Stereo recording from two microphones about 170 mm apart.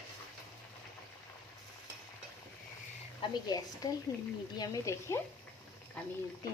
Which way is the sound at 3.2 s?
25° left (ahead or behind).